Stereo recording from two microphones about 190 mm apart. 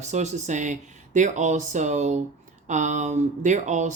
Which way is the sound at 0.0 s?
35° right (ahead or behind).